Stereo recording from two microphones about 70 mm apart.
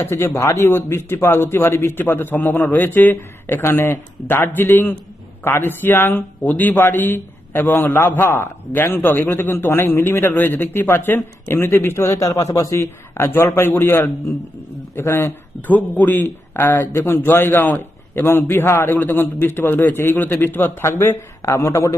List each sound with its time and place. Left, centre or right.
0.0 s speech: left
13.1 s a man's voice: left
16.2 s speech: left